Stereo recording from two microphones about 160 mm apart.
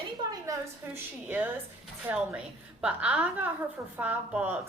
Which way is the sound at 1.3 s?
10° right (ahead or behind).